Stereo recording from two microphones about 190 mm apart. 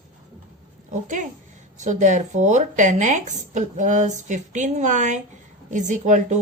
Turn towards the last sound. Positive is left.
turn(degrees=-40)  # may be behind; listen again after turning